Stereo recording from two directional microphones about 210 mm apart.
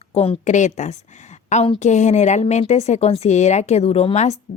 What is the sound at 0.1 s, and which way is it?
A woman's voice, 30° left (ahead or behind).